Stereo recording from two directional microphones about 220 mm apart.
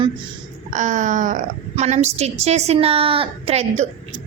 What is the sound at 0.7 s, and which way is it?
A woman's voice, 35° right (ahead or behind).